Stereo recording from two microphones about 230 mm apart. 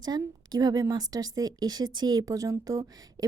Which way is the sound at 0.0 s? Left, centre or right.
Centre.